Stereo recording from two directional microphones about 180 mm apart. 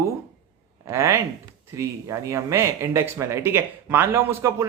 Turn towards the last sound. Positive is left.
turn(degrees=-15)  # may be behind; listen again after turning